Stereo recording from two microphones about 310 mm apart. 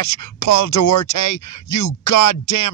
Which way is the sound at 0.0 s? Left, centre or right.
Left.